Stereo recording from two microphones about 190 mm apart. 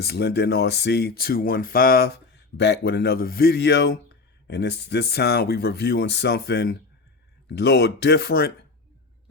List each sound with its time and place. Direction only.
0.0 s speech: 60° left (ahead or behind)